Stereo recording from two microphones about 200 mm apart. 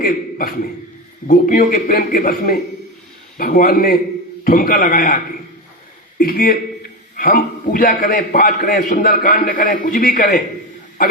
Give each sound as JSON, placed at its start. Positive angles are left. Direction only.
{"t": 0.0, "sound": "a man's voice", "side_deg": 45}